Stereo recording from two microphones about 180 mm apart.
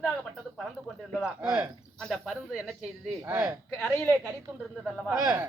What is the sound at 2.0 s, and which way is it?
A woman's voice, centre (ahead or behind).